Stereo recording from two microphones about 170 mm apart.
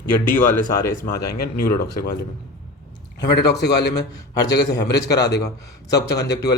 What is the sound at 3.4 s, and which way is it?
Speech, 70° left (ahead or behind).